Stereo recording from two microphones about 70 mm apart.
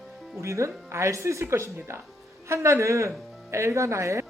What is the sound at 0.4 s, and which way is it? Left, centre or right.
Speech, right.